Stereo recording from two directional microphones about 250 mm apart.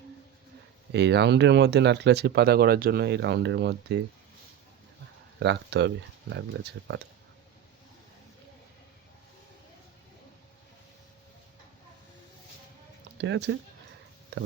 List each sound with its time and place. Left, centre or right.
0.9 s speech: right
5.4 s speech: right
13.1 s speech: right
14.3 s a sound: right